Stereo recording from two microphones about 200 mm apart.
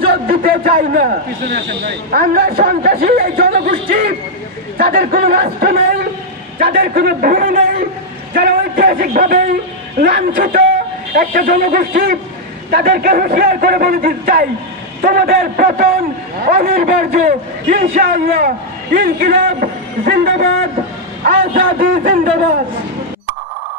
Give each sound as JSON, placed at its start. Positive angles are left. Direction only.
{"t": 0.0, "sound": "a man's voice", "side_deg": -50}
{"t": 4.7, "sound": "a man's voice", "side_deg": -45}
{"t": 21.5, "sound": "a man's voice", "side_deg": -45}